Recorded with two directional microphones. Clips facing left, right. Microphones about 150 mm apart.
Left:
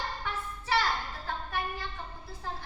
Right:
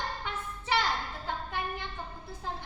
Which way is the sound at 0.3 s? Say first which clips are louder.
Left 1 dB; 20° right (ahead or behind).